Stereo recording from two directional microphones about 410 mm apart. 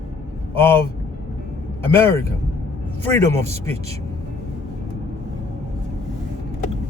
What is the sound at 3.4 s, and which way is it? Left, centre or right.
Speech, centre.